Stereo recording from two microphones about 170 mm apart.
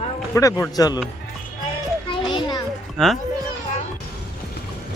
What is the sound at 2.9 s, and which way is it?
Speech, centre (ahead or behind).